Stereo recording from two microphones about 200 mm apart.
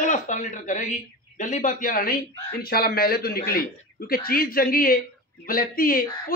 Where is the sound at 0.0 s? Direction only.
40° left (ahead or behind).